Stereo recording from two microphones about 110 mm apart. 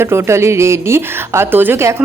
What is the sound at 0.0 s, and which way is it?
Speech, 25° right (ahead or behind).